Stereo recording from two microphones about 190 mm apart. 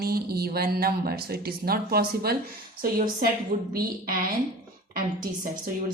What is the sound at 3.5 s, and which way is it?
Speech, 40° right (ahead or behind).